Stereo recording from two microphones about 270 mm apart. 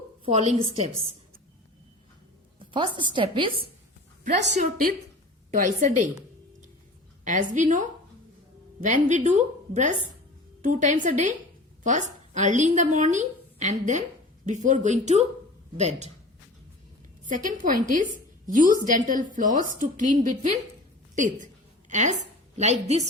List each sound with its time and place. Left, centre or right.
0.3 s a woman's voice: right
2.6 s a woman's voice: centre
7.3 s a woman's voice: right
17.2 s a woman's voice: right
21.2 s a sound: right
22.5 s a woman's voice: right